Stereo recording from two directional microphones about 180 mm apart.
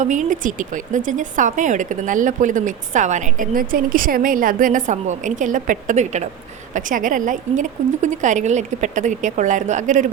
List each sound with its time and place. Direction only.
0.0 s speech: 45° right (ahead or behind)